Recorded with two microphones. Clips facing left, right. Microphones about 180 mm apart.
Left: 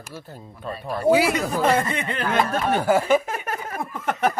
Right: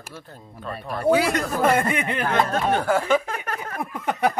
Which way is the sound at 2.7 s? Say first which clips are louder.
Left 3 dB; 10° left (ahead or behind).